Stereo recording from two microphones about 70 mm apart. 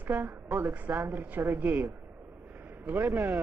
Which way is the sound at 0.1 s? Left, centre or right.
Right.